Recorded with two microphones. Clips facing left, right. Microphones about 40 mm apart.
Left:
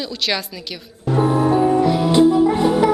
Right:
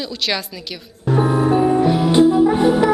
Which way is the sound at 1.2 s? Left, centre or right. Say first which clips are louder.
Even; centre.